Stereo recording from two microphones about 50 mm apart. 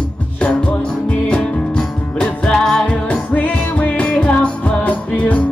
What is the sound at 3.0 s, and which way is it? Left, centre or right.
Music, left.